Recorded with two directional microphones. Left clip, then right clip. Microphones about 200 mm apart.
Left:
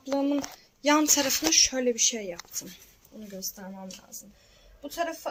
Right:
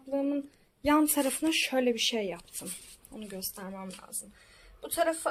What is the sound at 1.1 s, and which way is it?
Speech, 15° right (ahead or behind).